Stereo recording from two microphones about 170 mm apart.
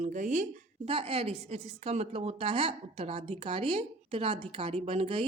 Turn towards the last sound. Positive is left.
turn(degrees=-35)  # may be behind; listen again after turning